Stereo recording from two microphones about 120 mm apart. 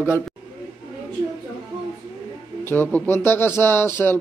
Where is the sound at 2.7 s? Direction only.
15° left (ahead or behind).